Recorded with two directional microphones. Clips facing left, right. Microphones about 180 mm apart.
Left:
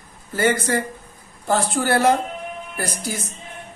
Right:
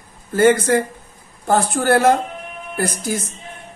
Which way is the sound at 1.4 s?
50° right (ahead or behind).